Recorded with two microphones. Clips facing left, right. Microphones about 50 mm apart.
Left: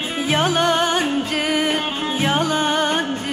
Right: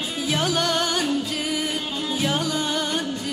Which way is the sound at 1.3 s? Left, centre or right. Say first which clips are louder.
Left 6 dB; left.